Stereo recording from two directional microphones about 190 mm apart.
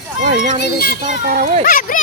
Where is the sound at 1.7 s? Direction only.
45° left (ahead or behind).